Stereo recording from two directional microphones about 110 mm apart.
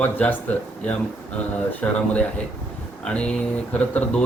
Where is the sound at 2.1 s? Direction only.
10° left (ahead or behind).